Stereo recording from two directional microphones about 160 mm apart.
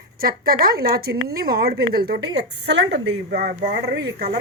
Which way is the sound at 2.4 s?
90° right.